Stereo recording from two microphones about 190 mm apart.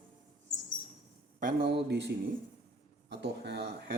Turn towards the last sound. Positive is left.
turn(degrees=-60)  # may be behind; listen again after turning